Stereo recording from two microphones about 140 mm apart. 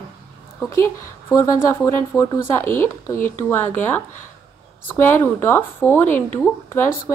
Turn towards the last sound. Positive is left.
turn(degrees=15)  # may be behind; listen again after turning